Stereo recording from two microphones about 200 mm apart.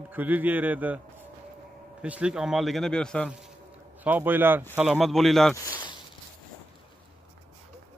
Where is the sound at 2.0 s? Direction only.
5° right (ahead or behind).